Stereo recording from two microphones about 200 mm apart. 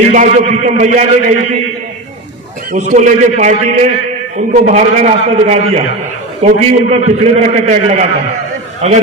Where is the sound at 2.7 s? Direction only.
35° right (ahead or behind).